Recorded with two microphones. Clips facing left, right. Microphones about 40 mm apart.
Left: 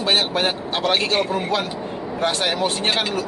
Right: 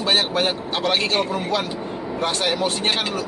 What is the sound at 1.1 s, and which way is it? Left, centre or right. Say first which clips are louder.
Speech: left 1 dB; centre.